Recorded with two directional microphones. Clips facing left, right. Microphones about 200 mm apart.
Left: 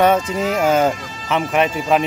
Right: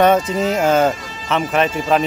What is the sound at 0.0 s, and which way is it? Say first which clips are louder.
Speech: right 2 dB; 10° left (ahead or behind).